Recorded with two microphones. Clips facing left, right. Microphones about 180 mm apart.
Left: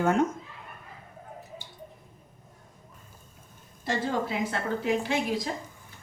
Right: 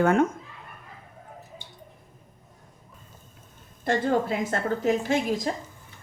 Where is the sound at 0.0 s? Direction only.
55° right (ahead or behind).